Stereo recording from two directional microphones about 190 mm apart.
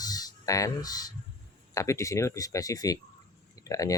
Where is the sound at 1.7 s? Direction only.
15° left (ahead or behind).